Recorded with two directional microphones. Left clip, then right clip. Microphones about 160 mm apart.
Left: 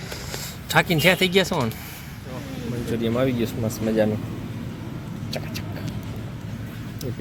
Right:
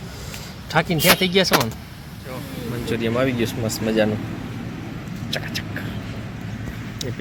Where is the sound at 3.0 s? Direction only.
5° left (ahead or behind).